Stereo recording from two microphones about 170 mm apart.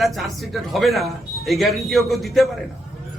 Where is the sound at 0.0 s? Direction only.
Centre (ahead or behind).